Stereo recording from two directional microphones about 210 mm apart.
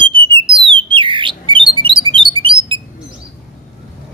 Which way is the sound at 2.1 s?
25° right (ahead or behind).